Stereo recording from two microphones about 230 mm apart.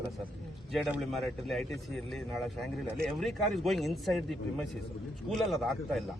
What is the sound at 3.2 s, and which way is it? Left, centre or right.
Speech, centre.